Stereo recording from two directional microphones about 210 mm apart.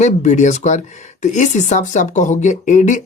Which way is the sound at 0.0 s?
35° left (ahead or behind).